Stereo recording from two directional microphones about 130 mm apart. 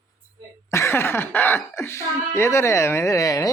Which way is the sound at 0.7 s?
20° left (ahead or behind).